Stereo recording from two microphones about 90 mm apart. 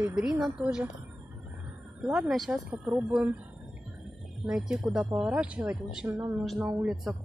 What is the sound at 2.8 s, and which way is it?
Speech, 15° right (ahead or behind).